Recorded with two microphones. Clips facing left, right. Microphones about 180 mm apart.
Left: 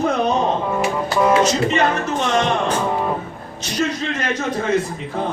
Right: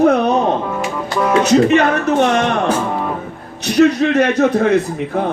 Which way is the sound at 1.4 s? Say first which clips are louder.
Right 6 dB; 65° right (ahead or behind).